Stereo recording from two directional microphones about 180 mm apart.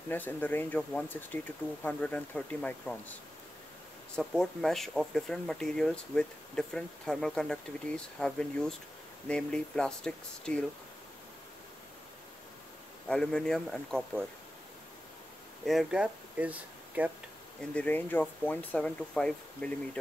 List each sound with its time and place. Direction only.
0.1 s speech: 10° left (ahead or behind)
4.1 s speech: centre (ahead or behind)
13.1 s speech: 5° left (ahead or behind)
15.6 s speech: centre (ahead or behind)
17.7 s speech: 10° left (ahead or behind)